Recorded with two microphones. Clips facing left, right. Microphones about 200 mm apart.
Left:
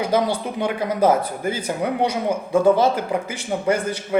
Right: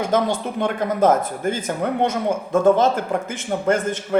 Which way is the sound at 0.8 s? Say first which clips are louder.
Right 1 dB; 50° right (ahead or behind).